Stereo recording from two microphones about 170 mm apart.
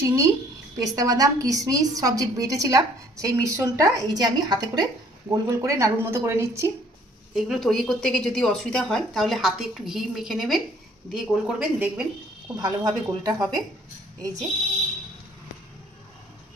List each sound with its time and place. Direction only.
0.0 s a woman's voice: 15° right (ahead or behind)
7.3 s speech: centre (ahead or behind)
12.5 s a woman's voice: 25° right (ahead or behind)